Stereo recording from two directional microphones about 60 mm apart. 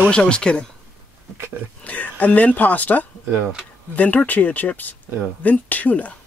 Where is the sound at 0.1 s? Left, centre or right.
Centre.